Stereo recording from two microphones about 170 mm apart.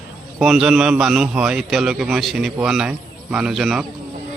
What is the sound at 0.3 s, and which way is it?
A man's voice, 5° right (ahead or behind).